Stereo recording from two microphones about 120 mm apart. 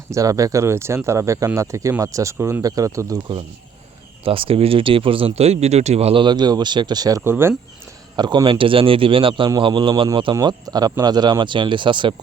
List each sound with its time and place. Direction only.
0.1 s speech: 30° right (ahead or behind)
4.2 s speech: 50° right (ahead or behind)
6.2 s speech: 35° right (ahead or behind)
7.3 s speech: 20° right (ahead or behind)
8.1 s speech: 35° right (ahead or behind)